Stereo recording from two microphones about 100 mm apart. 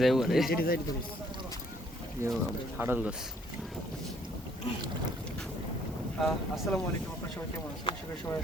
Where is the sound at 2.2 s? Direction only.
30° right (ahead or behind).